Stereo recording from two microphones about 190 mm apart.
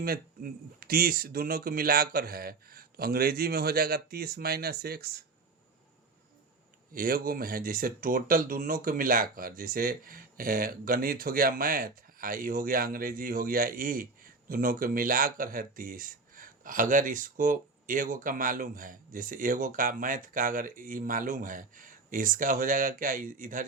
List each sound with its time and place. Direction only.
0.0 s speech: 50° right (ahead or behind)
6.9 s speech: 50° right (ahead or behind)